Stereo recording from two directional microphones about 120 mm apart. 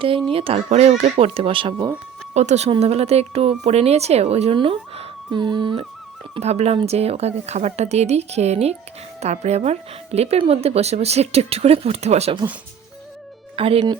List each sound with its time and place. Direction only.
0.3 s speech: 50° right (ahead or behind)
2.3 s speech: 70° right (ahead or behind)
2.6 s speech: 55° right (ahead or behind)
4.5 s speech: 50° right (ahead or behind)
6.4 s speech: 60° right (ahead or behind)
13.6 s speech: 50° right (ahead or behind)